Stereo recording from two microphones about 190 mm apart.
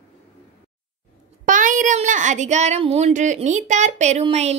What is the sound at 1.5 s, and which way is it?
Speech, 45° right (ahead or behind).